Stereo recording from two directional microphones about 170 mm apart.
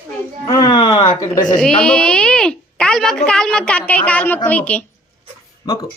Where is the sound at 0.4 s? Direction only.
25° left (ahead or behind).